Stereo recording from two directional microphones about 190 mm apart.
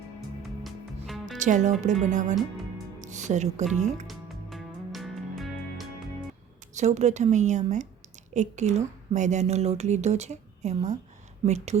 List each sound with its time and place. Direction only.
1.0 s music: centre (ahead or behind)
1.4 s a woman's voice: 40° right (ahead or behind)
4.0 s music: centre (ahead or behind)
6.7 s a woman's voice: 35° right (ahead or behind)